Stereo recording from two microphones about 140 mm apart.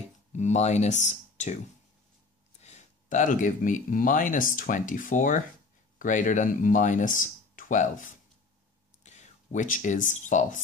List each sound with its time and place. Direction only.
0.3 s speech: 55° left (ahead or behind)
2.6 s speech: 55° left (ahead or behind)